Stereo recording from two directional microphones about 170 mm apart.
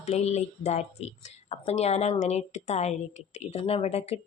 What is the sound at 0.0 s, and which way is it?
A woman's voice, 40° left (ahead or behind).